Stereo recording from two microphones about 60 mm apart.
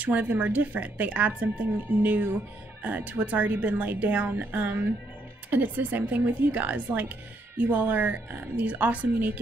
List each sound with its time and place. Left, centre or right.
0.0 s a woman's voice: right